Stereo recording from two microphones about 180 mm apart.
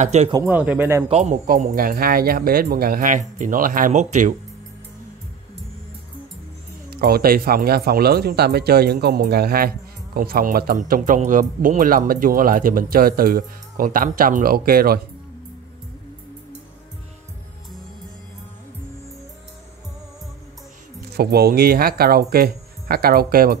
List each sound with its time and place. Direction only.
0.0 s speech: 40° right (ahead or behind)
0.3 s speech: 15° right (ahead or behind)
1.0 s speech: 35° right (ahead or behind)
6.9 s speech: 60° right (ahead or behind)
21.2 s speech: 60° right (ahead or behind)